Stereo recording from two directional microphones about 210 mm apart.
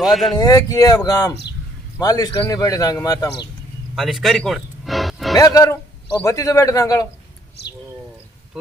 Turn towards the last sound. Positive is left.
turn(degrees=15)  # may be behind; listen again after turning